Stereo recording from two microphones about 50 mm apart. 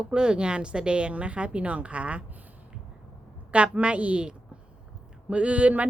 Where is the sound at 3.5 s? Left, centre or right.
Right.